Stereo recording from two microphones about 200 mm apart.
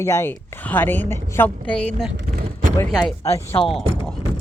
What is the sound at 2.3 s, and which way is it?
Vehicle, 40° right (ahead or behind).